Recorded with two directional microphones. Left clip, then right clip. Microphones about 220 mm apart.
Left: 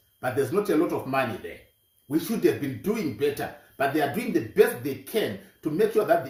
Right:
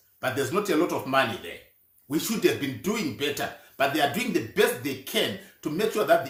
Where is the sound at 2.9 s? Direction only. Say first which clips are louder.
Left 3 dB; 30° right (ahead or behind).